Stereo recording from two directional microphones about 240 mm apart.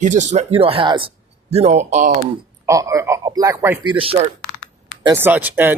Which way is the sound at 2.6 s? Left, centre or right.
Centre.